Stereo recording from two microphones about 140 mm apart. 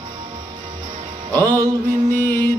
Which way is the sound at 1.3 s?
25° right (ahead or behind).